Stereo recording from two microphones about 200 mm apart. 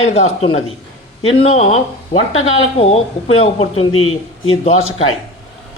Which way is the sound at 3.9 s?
90° left.